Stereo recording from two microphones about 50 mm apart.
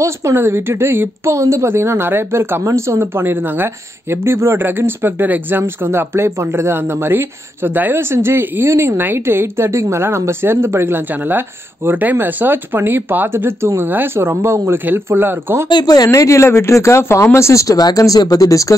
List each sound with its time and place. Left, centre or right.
0.3 s speech: right
1.7 s speech: right
2.6 s speech: right
3.0 s a woman's voice: right
4.6 s a woman's voice: right
5.6 s speech: right
8.0 s a woman's voice: right
13.8 s speech: right
14.1 s a woman's voice: right
16.1 s speech: left